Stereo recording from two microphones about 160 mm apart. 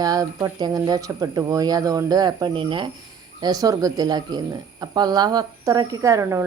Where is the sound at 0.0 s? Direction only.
20° right (ahead or behind).